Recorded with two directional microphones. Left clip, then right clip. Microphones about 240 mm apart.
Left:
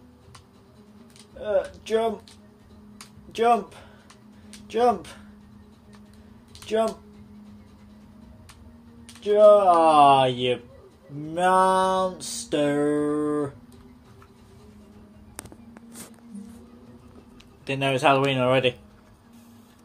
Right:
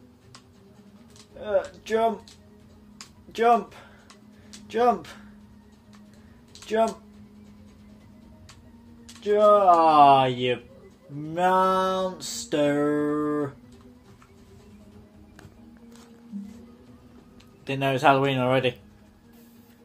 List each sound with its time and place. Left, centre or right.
1.4 s music: centre
3.3 s speech: centre
4.6 s music: centre
6.7 s music: centre
9.2 s music: centre
17.6 s music: centre